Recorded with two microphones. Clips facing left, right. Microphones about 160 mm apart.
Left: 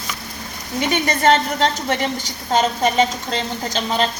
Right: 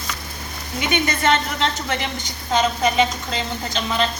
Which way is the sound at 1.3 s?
40° left (ahead or behind).